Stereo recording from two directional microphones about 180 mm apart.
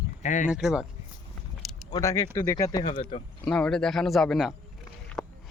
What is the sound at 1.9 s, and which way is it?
Speech, 15° left (ahead or behind).